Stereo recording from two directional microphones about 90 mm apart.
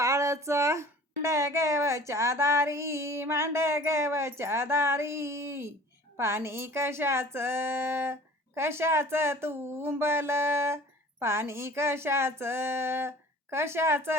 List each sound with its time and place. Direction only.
0.0 s a child's voice: 35° right (ahead or behind)